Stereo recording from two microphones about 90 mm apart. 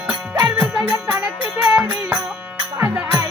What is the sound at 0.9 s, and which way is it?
Music, 20° right (ahead or behind).